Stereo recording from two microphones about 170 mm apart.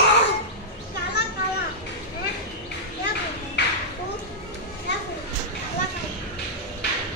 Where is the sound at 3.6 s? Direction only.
90° left.